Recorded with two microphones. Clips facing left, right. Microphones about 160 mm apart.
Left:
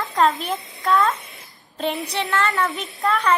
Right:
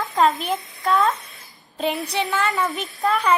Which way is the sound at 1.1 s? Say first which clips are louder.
Left 1 dB; 25° left (ahead or behind).